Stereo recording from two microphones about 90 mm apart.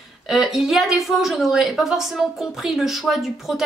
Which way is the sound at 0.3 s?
Centre (ahead or behind).